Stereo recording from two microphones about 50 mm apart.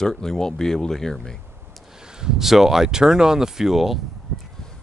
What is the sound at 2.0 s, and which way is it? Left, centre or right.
Speech, centre.